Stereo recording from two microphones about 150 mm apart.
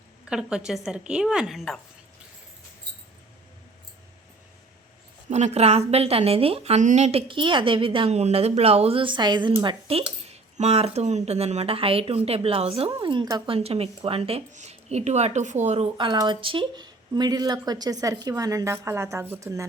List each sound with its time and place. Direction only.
0.3 s a woman's voice: 5° right (ahead or behind)
5.3 s a woman's voice: 45° right (ahead or behind); by 13.6 s 25° right (ahead or behind)
13.6 s speech: 40° right (ahead or behind)
16.0 s speech: 30° right (ahead or behind)